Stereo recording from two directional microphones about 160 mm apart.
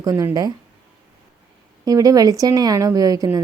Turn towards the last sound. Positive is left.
turn(degrees=-20)  # may be behind; listen again after turning